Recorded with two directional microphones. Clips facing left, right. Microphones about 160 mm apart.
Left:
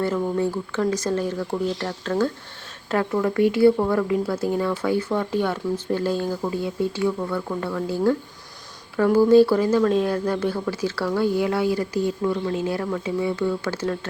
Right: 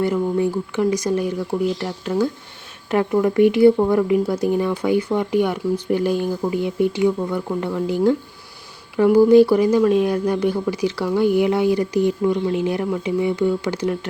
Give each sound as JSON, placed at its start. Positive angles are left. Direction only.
{"t": 0.0, "sound": "speech", "side_deg": -15}